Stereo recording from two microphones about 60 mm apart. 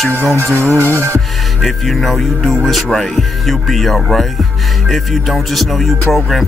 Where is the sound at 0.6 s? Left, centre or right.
Right.